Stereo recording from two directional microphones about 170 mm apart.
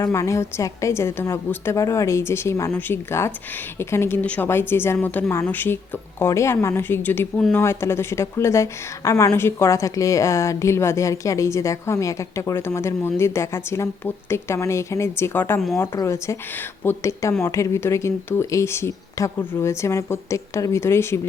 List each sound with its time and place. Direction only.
0.0 s speech: 20° left (ahead or behind)